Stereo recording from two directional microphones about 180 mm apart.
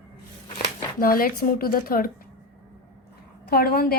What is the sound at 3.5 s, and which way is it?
Speech, 60° left (ahead or behind).